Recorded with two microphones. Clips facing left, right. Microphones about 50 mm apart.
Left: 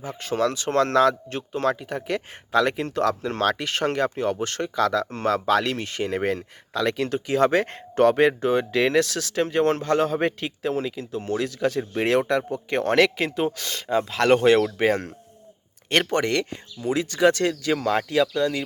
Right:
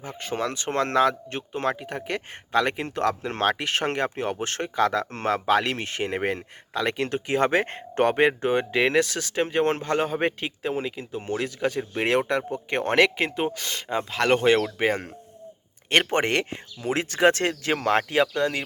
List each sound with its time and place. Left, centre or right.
0.0 s speech: centre
0.7 s speech: right
3.2 s speech: right
3.5 s speech: centre
5.5 s speech: centre
5.7 s speech: right; by 9.4 s centre
9.4 s speech: right
16.0 s speech: right